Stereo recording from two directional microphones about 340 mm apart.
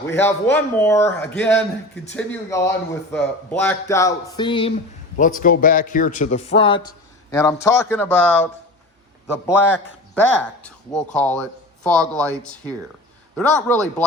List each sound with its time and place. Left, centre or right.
0.0 s a man's voice: centre